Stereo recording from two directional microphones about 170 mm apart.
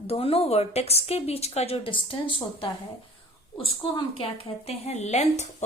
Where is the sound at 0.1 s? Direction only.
35° left (ahead or behind).